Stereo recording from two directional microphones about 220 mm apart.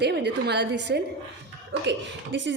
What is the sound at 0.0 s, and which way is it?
A woman's voice, 50° right (ahead or behind).